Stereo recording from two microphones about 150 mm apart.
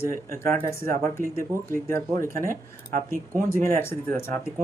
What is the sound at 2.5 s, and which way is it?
Speech, 65° right (ahead or behind).